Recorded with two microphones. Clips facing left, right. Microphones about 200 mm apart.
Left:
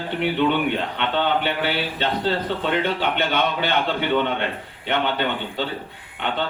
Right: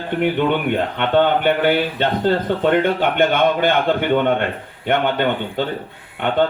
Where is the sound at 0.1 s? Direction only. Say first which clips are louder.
Right 3 dB; 50° right (ahead or behind).